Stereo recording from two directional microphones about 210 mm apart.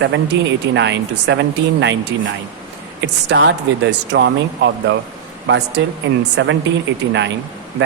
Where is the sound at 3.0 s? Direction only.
55° right (ahead or behind).